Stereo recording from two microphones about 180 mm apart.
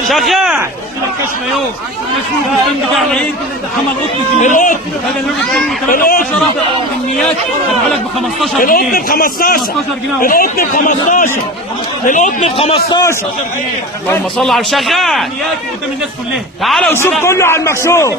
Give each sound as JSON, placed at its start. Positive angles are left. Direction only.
{"t": 0.1, "sound": "a man's voice", "side_deg": 0}
{"t": 4.4, "sound": "speech", "side_deg": 45}
{"t": 5.9, "sound": "speech", "side_deg": 50}
{"t": 8.6, "sound": "a man's voice", "side_deg": 55}
{"t": 14.1, "sound": "a man's voice", "side_deg": 0}
{"t": 16.6, "sound": "a man's voice", "side_deg": 0}
{"t": 17.1, "sound": "a man's voice", "side_deg": 10}